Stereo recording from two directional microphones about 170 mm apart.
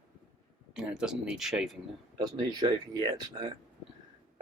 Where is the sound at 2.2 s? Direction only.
25° right (ahead or behind).